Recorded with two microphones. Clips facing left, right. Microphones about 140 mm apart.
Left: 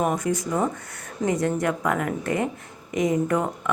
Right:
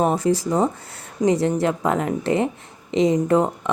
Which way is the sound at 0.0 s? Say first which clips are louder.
Right 5 dB; 30° right (ahead or behind).